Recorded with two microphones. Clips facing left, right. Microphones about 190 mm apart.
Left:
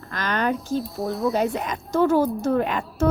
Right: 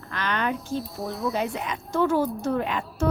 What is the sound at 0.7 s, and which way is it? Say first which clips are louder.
Speech: left 5 dB; centre (ahead or behind).